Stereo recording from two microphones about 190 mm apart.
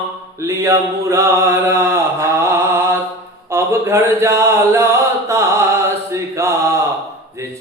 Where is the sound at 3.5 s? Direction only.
15° right (ahead or behind).